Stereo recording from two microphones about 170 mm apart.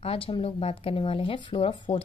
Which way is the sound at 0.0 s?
35° left (ahead or behind).